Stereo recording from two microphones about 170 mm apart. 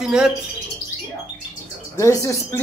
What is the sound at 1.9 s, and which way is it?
Speech, 20° left (ahead or behind).